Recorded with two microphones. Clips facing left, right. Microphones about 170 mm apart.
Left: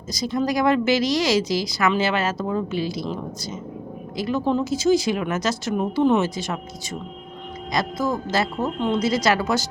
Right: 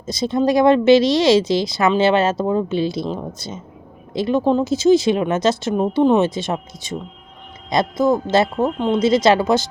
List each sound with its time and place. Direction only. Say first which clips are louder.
0.1 s speech: right 6 dB; 25° right (ahead or behind)